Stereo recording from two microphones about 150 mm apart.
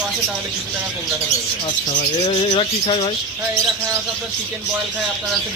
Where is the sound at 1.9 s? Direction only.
50° left (ahead or behind).